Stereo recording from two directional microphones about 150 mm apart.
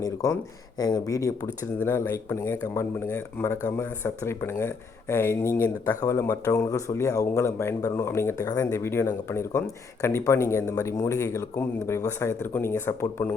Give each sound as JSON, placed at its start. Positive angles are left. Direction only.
{"t": 0.0, "sound": "speech", "side_deg": 20}